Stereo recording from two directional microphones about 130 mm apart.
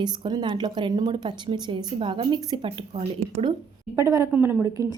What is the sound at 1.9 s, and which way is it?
A woman's voice, 45° right (ahead or behind).